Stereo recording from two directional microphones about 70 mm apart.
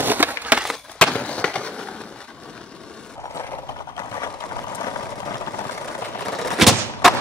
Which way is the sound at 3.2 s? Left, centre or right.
Left.